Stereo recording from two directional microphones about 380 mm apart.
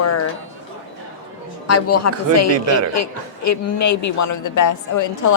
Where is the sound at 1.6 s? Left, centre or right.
Left.